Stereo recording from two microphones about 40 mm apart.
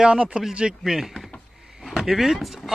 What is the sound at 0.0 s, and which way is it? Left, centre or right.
Speech, right.